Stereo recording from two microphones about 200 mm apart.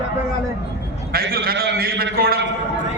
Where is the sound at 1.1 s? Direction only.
50° right (ahead or behind).